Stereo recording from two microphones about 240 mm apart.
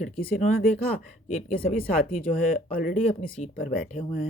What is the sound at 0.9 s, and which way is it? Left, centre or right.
Speech, left.